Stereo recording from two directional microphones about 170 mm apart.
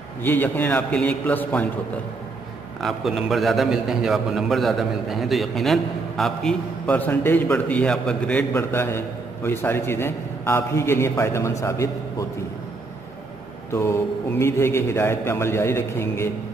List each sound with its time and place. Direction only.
0.2 s a man's voice: 10° left (ahead or behind)
2.8 s a man's voice: centre (ahead or behind); by 12.3 s 20° left (ahead or behind)
13.7 s a man's voice: 15° left (ahead or behind)